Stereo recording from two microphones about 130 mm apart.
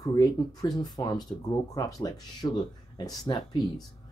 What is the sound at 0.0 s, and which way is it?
Speech, 30° left (ahead or behind).